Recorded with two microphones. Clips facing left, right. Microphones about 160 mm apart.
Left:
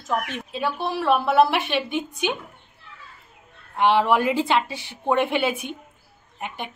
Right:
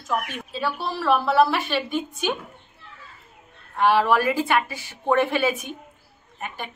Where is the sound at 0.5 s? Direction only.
20° left (ahead or behind).